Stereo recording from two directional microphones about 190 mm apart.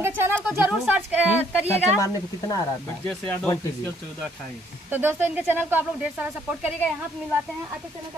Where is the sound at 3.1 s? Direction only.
5° left (ahead or behind).